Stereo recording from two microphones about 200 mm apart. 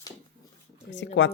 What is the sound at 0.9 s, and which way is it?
Speech, 65° left (ahead or behind).